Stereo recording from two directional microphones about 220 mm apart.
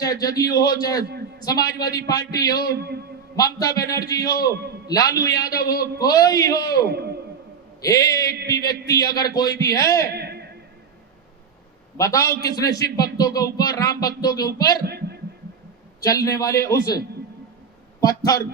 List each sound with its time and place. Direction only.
0.0 s a man's voice: 15° left (ahead or behind)
2.6 s a man's voice: 45° right (ahead or behind)
3.3 s a man's voice: 15° left (ahead or behind)
4.5 s a man's voice: 45° right (ahead or behind)
4.9 s a man's voice: 15° left (ahead or behind)
6.8 s a man's voice: 45° right (ahead or behind)
7.8 s a man's voice: 15° left (ahead or behind)
10.2 s a sound: 45° right (ahead or behind)
11.9 s a man's voice: 15° left (ahead or behind)
14.8 s a sound: 45° right (ahead or behind)
16.0 s a man's voice: 15° left (ahead or behind)
18.0 s a man's voice: 15° left (ahead or behind)